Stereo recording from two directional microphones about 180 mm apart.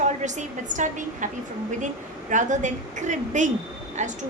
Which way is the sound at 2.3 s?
45° right (ahead or behind).